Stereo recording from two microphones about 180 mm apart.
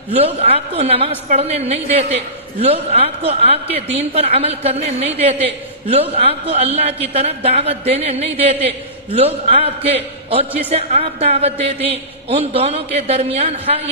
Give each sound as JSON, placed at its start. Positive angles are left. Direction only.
{"t": 0.1, "sound": "a woman's voice", "side_deg": -35}